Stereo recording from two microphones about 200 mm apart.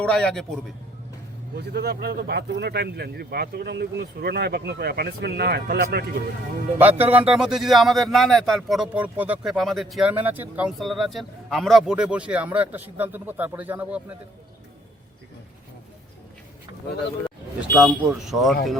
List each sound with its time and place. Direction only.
0.0 s a man's voice: 5° left (ahead or behind)
1.5 s speech: 55° right (ahead or behind)
6.7 s a man's voice: 10° right (ahead or behind)
17.7 s a man's voice: 5° left (ahead or behind)